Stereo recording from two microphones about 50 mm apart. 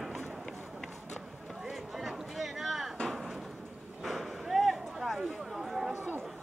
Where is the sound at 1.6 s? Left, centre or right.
Centre.